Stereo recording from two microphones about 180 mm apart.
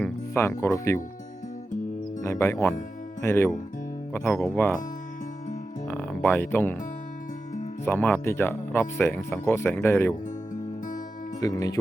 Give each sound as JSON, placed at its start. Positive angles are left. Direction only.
{"t": 0.0, "sound": "speech", "side_deg": 15}
{"t": 2.2, "sound": "speech", "side_deg": 15}
{"t": 5.9, "sound": "speech", "side_deg": 5}
{"t": 7.9, "sound": "speech", "side_deg": 10}
{"t": 11.3, "sound": "speech", "side_deg": 20}